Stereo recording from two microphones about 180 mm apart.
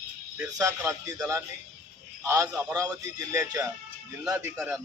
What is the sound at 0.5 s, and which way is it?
A man's voice, 15° right (ahead or behind).